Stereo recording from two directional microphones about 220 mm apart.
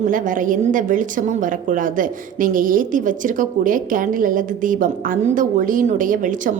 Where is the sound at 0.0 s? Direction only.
35° right (ahead or behind).